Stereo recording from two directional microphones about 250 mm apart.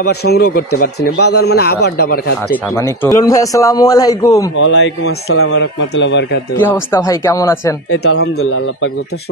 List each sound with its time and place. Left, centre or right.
0.0 s a man's voice: left
2.5 s a man's voice: centre
4.6 s a man's voice: left
6.5 s a man's voice: centre
8.4 s a man's voice: left